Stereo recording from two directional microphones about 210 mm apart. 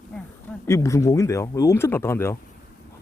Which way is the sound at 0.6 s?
15° left (ahead or behind).